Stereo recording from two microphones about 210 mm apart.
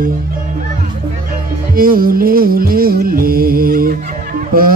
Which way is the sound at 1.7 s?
45° right (ahead or behind).